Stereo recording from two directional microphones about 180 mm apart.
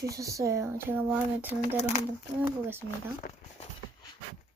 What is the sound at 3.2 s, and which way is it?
Speech, 60° left (ahead or behind).